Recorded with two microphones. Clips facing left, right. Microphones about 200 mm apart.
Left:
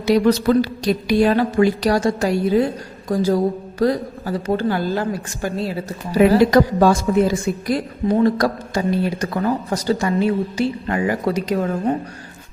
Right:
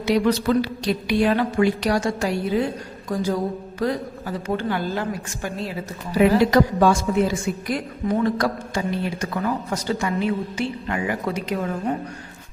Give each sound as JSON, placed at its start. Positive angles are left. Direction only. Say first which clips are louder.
{"t": 0.0, "sound": "a woman's voice", "louder": "left 4 dB", "side_deg": 40}